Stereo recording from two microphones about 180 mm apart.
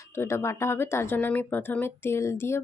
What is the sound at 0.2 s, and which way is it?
Speech, 15° left (ahead or behind).